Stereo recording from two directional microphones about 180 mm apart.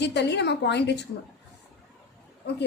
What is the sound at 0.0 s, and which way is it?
A woman's voice, 70° left (ahead or behind).